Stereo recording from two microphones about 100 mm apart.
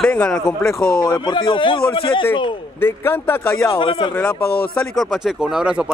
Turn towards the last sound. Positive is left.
turn(degrees=-5)  # may be behind; listen again after turning